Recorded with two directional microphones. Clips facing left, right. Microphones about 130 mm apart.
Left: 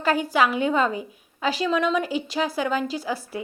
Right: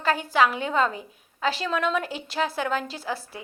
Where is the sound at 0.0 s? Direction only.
10° left (ahead or behind).